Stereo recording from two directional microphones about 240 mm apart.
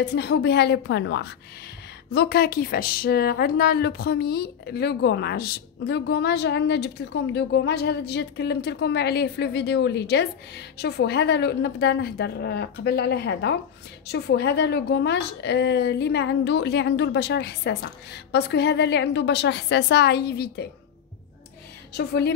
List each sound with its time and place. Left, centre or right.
0.0 s speech: left
21.9 s speech: left